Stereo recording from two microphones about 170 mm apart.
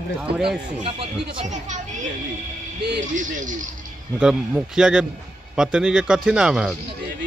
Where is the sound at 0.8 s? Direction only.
35° right (ahead or behind).